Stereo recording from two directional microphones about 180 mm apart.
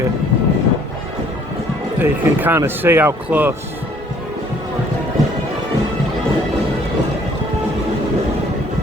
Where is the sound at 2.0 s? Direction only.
10° right (ahead or behind).